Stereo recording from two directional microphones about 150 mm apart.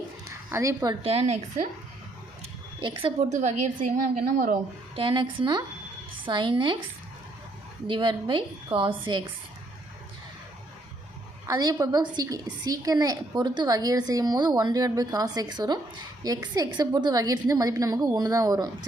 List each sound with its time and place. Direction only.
0.3 s a woman's voice: 20° right (ahead or behind)
1.0 s a woman's voice: 45° right (ahead or behind)
2.8 s a woman's voice: 35° right (ahead or behind)
3.3 s a woman's voice: 55° right (ahead or behind)
4.9 s a woman's voice: 35° right (ahead or behind)
7.9 s a woman's voice: 35° right (ahead or behind)
11.4 s a woman's voice: 25° right (ahead or behind)